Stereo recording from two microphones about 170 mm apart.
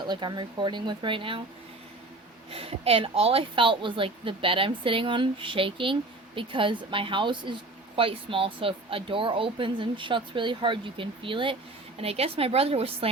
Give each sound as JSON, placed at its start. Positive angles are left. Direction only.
{"t": 0.0, "sound": "speech", "side_deg": -25}
{"t": 2.5, "sound": "a woman's voice", "side_deg": -35}